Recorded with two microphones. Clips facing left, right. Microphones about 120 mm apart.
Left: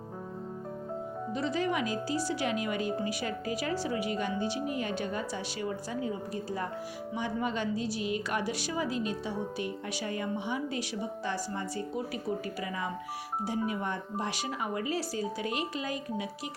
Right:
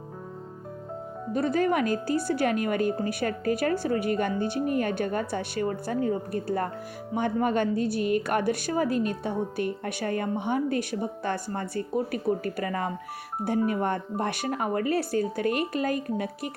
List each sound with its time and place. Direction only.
1.3 s speech: 50° right (ahead or behind)